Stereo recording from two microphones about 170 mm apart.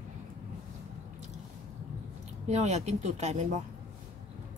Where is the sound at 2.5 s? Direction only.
40° right (ahead or behind).